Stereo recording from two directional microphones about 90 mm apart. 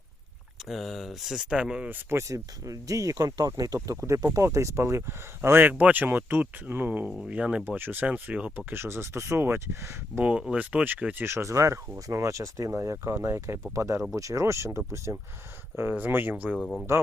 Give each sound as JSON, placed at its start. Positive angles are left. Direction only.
{"t": 0.7, "sound": "speech", "side_deg": 0}
{"t": 1.9, "sound": "speech", "side_deg": -30}
{"t": 8.7, "sound": "speech", "side_deg": -30}
{"t": 10.2, "sound": "speech", "side_deg": -15}
{"t": 16.6, "sound": "speech", "side_deg": 5}